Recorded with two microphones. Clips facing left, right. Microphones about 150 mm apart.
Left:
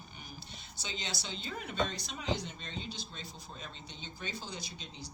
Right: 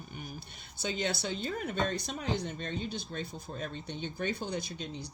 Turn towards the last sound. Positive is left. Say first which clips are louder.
# right 8 dB
turn(degrees=-55)  # may be behind; listen again after turning